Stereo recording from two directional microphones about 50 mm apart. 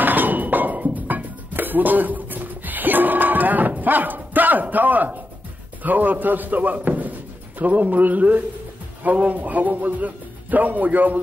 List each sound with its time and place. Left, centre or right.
0.0 s music: right
5.8 s a man's voice: right